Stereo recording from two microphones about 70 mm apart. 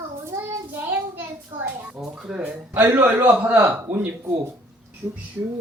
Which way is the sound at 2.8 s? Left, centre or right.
Right.